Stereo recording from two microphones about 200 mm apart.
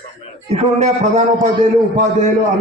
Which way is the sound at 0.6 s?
35° right (ahead or behind).